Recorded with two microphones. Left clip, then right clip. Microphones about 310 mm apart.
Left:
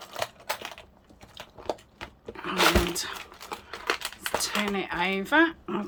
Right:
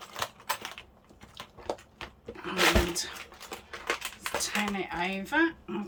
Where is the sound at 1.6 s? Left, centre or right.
Centre.